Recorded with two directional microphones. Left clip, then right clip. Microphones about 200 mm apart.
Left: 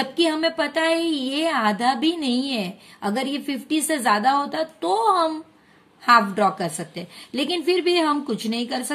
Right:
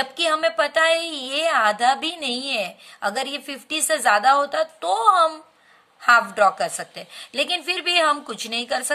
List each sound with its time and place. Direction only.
0.0 s a woman's voice: 25° right (ahead or behind)